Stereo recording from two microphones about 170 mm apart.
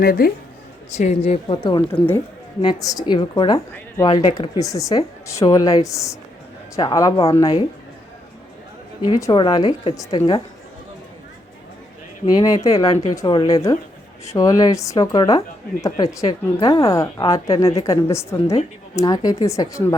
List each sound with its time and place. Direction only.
0.0 s speech: 60° left (ahead or behind)
0.9 s a woman's voice: 40° left (ahead or behind); by 7.1 s 20° left (ahead or behind)
7.2 s a woman's voice: 30° left (ahead or behind)
9.0 s speech: 20° left (ahead or behind)
12.2 s a woman's voice: 25° left (ahead or behind)